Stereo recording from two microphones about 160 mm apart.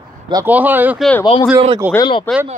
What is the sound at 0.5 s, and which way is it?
Speech, 10° right (ahead or behind).